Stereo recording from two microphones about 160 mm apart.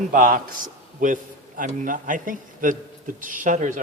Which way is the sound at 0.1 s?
60° right (ahead or behind).